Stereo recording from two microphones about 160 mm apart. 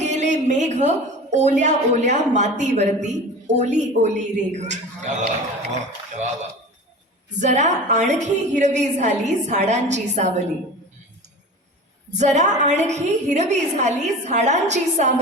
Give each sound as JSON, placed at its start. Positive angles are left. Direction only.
{"t": 0.0, "sound": "a sound", "side_deg": -45}
{"t": 1.3, "sound": "a woman's voice", "side_deg": -45}
{"t": 7.3, "sound": "a woman's voice", "side_deg": -45}
{"t": 12.1, "sound": "a woman's voice", "side_deg": -45}